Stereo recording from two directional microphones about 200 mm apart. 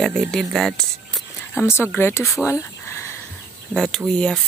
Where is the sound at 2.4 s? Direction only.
15° left (ahead or behind).